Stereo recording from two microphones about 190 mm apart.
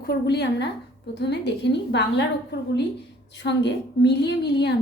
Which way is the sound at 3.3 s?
65° left (ahead or behind).